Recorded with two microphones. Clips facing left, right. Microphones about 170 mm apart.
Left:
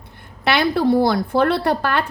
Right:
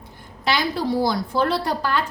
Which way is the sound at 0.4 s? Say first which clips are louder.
Left 6 dB; 60° left (ahead or behind).